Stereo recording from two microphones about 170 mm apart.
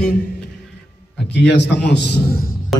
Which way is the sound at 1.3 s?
90° left.